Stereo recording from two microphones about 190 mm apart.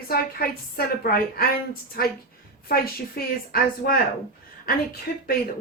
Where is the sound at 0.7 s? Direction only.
50° left (ahead or behind).